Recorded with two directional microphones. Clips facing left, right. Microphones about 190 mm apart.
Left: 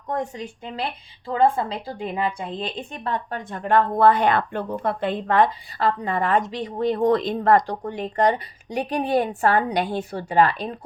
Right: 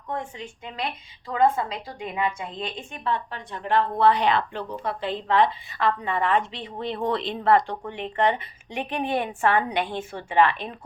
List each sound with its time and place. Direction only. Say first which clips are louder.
0.1 s a woman's voice: left 5 dB; 40° left (ahead or behind)